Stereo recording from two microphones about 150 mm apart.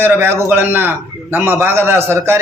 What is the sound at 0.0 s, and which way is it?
A man's voice, 15° right (ahead or behind).